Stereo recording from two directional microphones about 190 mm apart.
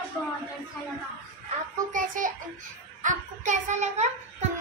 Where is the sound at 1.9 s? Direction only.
45° right (ahead or behind).